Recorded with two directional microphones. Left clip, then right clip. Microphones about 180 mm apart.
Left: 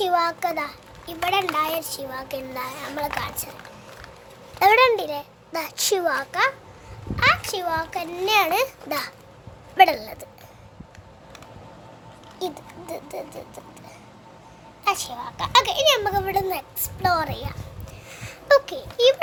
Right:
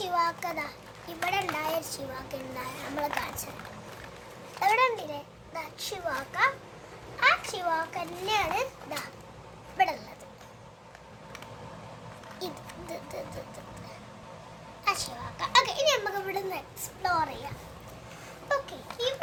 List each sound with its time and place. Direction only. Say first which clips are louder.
0.0 s a child's voice: left 7 dB; 45° left (ahead or behind)
4.6 s a child's voice: left 9 dB; 55° left (ahead or behind)
9.7 s a child's voice: left 11 dB; 55° left (ahead or behind)
12.4 s speech: left 9 dB; 40° left (ahead or behind)
14.8 s a child's voice: left 6 dB; 45° left (ahead or behind)
18.4 s a child's voice: left 13 dB; 75° left (ahead or behind)